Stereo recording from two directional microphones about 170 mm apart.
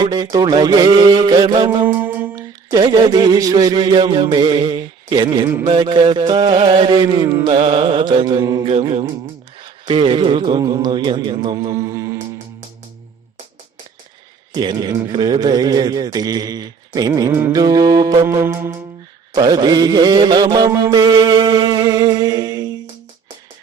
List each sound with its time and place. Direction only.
0.0 s a man's voice: 25° right (ahead or behind)
1.8 s mantra: 10° right (ahead or behind)
2.3 s a man's voice: 20° right (ahead or behind)
8.6 s mantra: 35° right (ahead or behind)
9.8 s a man's voice: 30° right (ahead or behind)
14.5 s a man's voice: 25° right (ahead or behind)